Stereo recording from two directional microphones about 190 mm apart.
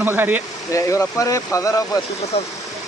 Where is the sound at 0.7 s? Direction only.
15° left (ahead or behind).